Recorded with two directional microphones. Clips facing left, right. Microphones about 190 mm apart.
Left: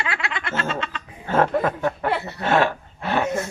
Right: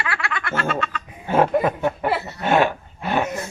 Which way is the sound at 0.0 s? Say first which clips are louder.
Right 1 dB; 20° left (ahead or behind).